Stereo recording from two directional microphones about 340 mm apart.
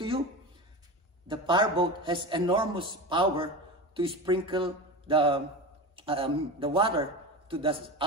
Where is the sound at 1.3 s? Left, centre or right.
Centre.